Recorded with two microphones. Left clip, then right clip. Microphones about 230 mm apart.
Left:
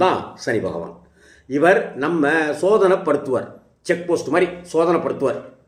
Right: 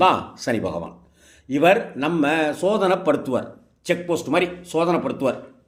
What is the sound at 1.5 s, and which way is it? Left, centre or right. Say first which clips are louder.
A man's voice: left 2 dB; right.